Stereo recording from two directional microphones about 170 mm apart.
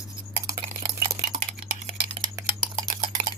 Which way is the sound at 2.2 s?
20° right (ahead or behind).